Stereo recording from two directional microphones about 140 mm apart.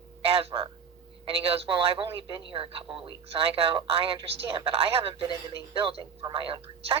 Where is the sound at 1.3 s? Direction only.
45° right (ahead or behind).